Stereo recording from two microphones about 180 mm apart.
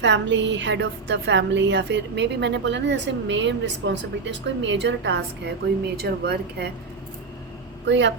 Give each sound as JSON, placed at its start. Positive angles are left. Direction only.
{"t": 0.0, "sound": "a woman's voice", "side_deg": -80}
{"t": 6.0, "sound": "speech", "side_deg": -65}
{"t": 7.9, "sound": "a woman's voice", "side_deg": -80}